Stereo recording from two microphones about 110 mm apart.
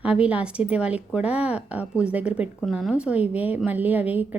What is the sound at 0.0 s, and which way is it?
A woman's voice, 10° right (ahead or behind).